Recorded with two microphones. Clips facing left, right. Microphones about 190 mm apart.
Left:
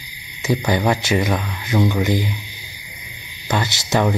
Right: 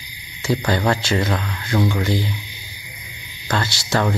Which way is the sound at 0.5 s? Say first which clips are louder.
Left 1 dB; 15° left (ahead or behind).